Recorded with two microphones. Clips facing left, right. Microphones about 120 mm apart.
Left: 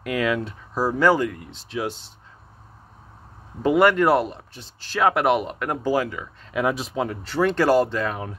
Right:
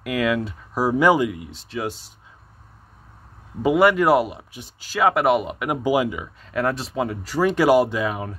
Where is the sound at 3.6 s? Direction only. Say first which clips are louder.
Right 1 dB; 5° right (ahead or behind).